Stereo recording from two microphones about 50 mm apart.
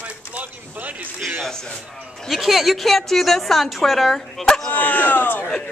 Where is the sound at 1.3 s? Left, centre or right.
Centre.